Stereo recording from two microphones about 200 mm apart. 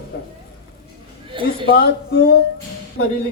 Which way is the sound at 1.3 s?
25° right (ahead or behind).